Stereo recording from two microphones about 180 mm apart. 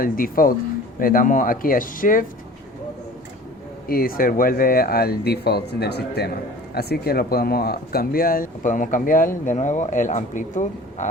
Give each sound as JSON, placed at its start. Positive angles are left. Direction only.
{"t": 0.0, "sound": "speech", "side_deg": 50}
{"t": 3.8, "sound": "speech", "side_deg": 55}